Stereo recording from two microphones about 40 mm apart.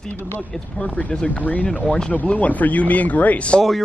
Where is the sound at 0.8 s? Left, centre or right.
Left.